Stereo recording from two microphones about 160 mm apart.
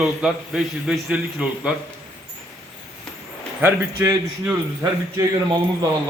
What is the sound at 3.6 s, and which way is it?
A man's voice, 10° right (ahead or behind).